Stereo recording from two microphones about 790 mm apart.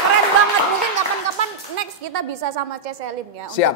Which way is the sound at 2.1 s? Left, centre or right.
Right.